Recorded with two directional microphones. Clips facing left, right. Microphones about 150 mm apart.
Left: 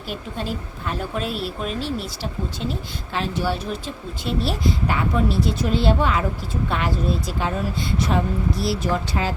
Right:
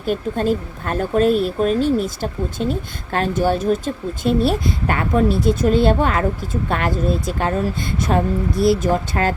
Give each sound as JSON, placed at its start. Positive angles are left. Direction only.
{"t": 0.0, "sound": "speech", "side_deg": -45}